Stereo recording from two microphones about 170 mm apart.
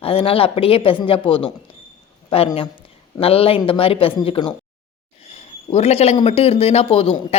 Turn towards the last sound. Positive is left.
turn(degrees=35)  # may be behind; listen again after turning